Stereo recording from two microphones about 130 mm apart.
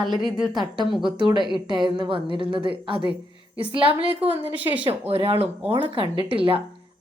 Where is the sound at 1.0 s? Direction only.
40° right (ahead or behind).